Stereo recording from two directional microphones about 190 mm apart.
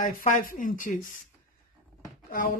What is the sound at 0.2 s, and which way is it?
Speech, 45° left (ahead or behind).